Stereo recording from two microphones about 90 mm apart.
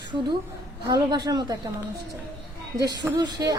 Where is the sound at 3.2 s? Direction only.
50° right (ahead or behind).